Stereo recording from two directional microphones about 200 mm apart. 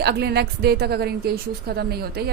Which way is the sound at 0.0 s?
55° right (ahead or behind).